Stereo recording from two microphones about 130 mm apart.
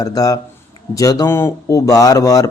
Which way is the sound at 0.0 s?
30° left (ahead or behind).